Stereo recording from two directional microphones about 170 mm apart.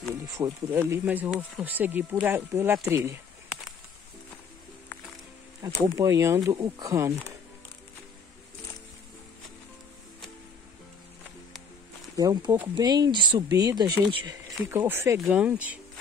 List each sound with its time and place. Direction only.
0.4 s speech: 15° right (ahead or behind)
5.6 s speech: 20° right (ahead or behind)
12.2 s speech: 20° right (ahead or behind)